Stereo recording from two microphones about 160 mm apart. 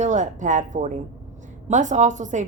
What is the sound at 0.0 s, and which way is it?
A woman's voice, 50° right (ahead or behind).